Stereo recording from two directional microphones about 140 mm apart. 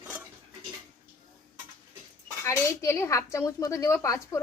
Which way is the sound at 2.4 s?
20° left (ahead or behind).